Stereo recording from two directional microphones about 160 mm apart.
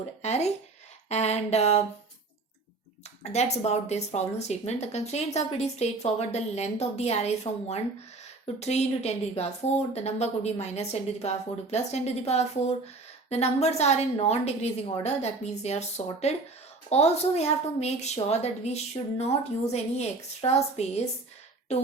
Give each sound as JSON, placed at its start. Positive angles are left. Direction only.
{"t": 0.2, "sound": "speech", "side_deg": 45}
{"t": 3.2, "sound": "speech", "side_deg": 45}